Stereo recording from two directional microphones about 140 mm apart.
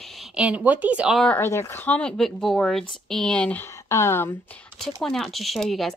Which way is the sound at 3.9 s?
15° left (ahead or behind).